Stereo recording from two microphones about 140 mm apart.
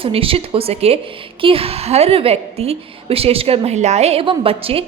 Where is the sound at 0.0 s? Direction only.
40° right (ahead or behind).